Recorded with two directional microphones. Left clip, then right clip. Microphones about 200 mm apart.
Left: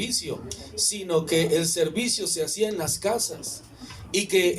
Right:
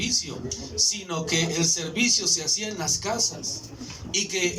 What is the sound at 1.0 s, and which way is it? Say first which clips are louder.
Speech: left 4 dB; 35° left (ahead or behind).